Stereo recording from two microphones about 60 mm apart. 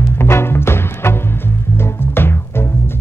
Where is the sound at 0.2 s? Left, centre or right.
Left.